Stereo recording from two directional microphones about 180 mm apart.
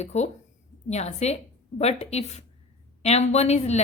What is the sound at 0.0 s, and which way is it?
A woman's voice, 40° left (ahead or behind).